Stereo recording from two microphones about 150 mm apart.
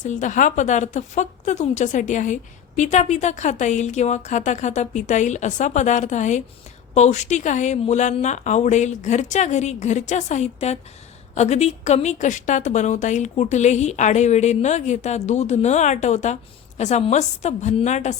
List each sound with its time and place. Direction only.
0.0 s a woman's voice: 55° left (ahead or behind)